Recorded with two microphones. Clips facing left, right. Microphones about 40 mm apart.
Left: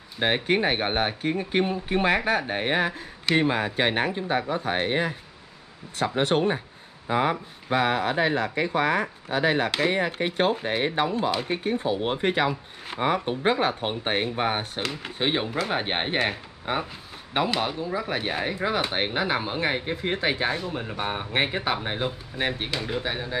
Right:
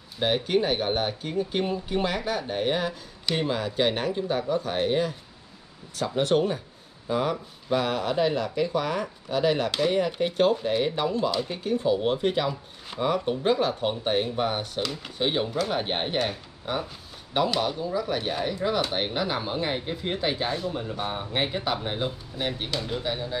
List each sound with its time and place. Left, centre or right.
0.2 s speech: left